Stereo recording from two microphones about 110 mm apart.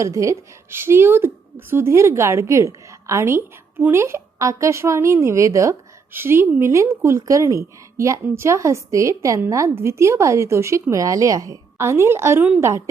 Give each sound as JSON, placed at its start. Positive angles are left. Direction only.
{"t": 0.0, "sound": "a woman's voice", "side_deg": -30}